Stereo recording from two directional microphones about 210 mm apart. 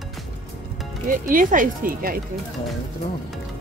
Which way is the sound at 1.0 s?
40° right (ahead or behind).